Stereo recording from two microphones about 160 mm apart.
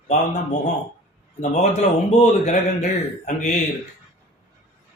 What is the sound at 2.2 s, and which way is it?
Speech, 45° left (ahead or behind).